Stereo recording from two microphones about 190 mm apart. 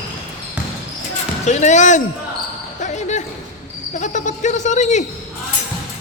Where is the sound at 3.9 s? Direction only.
40° left (ahead or behind).